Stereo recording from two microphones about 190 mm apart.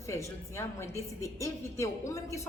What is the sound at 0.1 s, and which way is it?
A woman's voice, 15° left (ahead or behind).